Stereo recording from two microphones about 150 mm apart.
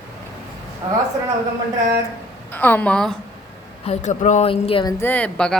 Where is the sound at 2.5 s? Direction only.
10° left (ahead or behind).